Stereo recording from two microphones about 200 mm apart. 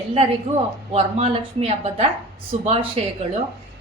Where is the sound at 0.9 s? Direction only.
30° right (ahead or behind).